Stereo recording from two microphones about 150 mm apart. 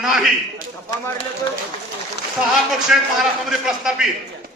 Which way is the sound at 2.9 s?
5° right (ahead or behind).